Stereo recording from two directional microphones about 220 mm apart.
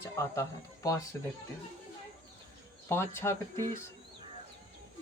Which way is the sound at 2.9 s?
10° left (ahead or behind).